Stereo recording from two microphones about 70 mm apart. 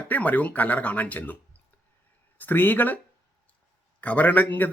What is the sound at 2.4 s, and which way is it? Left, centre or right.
Speech, left.